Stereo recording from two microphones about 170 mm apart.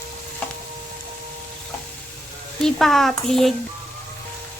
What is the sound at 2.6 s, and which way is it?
Speech, centre (ahead or behind).